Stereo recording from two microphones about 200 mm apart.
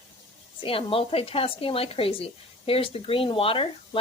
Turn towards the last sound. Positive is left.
turn(degrees=25)  # may be behind; listen again after turning